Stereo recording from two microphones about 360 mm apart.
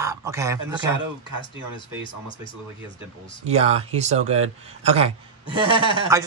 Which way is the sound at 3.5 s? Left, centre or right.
Centre.